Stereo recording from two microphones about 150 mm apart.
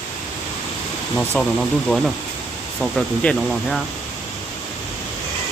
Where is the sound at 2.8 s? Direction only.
5° left (ahead or behind).